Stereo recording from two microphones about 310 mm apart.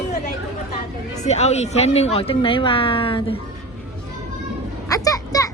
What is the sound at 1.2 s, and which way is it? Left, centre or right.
Speech, left.